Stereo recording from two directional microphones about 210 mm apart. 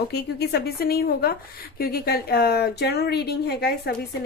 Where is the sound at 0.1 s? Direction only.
50° left (ahead or behind).